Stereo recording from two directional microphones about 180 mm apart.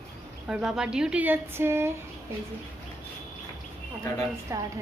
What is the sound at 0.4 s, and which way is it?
A woman's voice, 5° right (ahead or behind).